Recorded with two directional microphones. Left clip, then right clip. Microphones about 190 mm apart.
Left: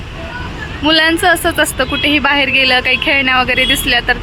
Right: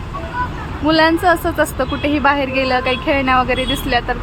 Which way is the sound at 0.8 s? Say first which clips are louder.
Left 2 dB; centre (ahead or behind).